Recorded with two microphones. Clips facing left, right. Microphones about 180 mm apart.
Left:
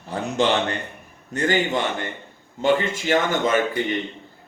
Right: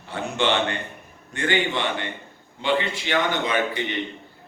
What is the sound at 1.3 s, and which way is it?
A man's voice, 40° left (ahead or behind).